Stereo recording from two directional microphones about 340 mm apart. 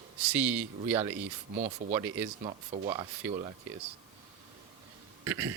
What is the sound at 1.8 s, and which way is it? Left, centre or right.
Speech, right.